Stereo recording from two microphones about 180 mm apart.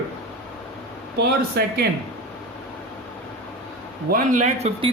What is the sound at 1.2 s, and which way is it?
Speech, 65° right (ahead or behind).